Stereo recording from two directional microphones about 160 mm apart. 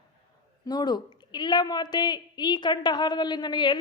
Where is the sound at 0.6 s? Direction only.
25° left (ahead or behind).